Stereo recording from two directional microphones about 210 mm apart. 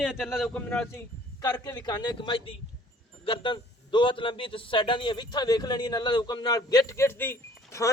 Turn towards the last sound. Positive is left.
turn(degrees=10)  # may be behind; listen again after turning